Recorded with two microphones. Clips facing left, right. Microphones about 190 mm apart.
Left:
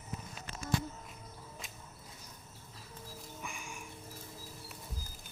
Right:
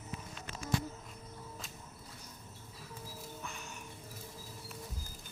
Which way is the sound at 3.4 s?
10° left (ahead or behind).